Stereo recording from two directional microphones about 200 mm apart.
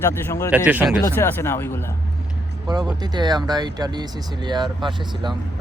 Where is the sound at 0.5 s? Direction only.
10° right (ahead or behind).